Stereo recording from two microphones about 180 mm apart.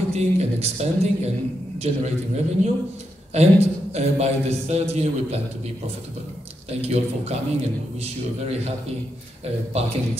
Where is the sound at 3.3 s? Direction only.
35° right (ahead or behind).